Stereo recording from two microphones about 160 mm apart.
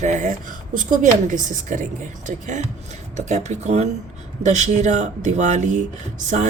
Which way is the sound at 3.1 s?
45° right (ahead or behind).